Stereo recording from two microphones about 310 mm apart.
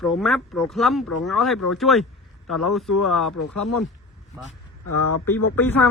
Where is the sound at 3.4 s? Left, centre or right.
Left.